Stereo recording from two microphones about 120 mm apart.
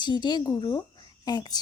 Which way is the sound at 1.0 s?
35° left (ahead or behind).